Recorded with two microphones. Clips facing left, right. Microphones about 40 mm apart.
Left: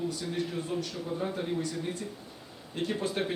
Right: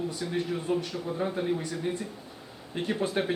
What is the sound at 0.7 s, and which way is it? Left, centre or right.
Speech, right.